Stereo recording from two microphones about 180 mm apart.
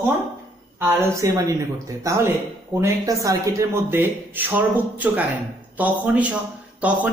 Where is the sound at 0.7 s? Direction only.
15° right (ahead or behind).